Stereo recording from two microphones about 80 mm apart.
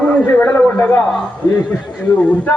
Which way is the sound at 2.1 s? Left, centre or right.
Centre.